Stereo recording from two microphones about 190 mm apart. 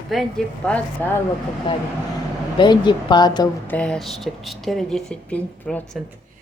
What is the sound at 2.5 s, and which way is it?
Speech, 25° left (ahead or behind).